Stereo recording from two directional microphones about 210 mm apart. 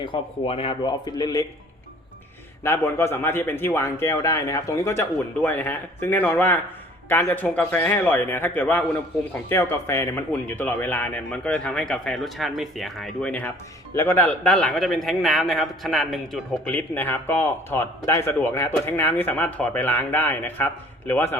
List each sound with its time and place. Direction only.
0.0 s a man's voice: 25° left (ahead or behind)
2.6 s a man's voice: 10° left (ahead or behind)